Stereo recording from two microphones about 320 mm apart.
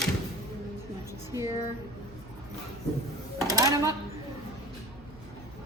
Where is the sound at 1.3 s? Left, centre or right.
Centre.